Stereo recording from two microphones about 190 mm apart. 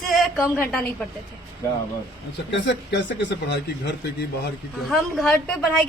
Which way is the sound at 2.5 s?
70° left (ahead or behind).